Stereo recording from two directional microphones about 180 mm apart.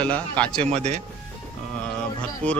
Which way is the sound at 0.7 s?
35° right (ahead or behind).